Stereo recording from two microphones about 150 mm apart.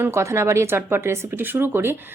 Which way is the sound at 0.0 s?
20° right (ahead or behind).